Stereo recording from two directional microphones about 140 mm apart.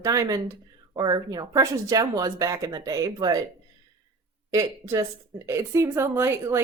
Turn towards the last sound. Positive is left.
turn(degrees=-20)  # may be behind; listen again after turning